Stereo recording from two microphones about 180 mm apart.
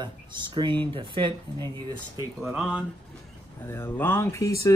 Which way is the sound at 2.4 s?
5° right (ahead or behind).